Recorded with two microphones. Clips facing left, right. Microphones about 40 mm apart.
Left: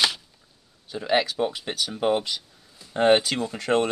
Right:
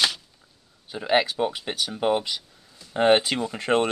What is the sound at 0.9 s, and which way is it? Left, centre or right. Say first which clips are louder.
Speech: right 1 dB; centre.